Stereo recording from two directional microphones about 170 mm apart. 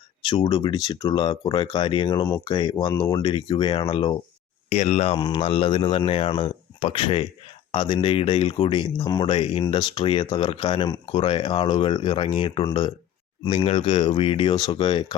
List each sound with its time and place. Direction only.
0.3 s speech: 30° left (ahead or behind)
4.7 s speech: 40° left (ahead or behind)